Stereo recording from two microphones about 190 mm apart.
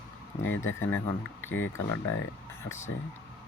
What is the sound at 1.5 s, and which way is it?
Speech, 90° left.